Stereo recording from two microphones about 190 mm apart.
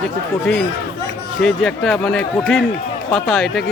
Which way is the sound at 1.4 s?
5° left (ahead or behind).